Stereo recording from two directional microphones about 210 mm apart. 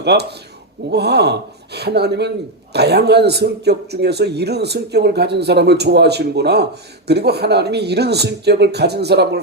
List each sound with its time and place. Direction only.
0.0 s a man's voice: 50° right (ahead or behind)